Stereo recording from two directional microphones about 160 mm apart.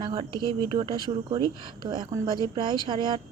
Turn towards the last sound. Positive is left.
turn(degrees=-30)  # may be behind; listen again after turning